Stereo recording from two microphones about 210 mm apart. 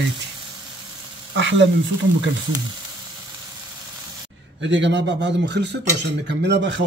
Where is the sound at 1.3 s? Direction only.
60° right (ahead or behind).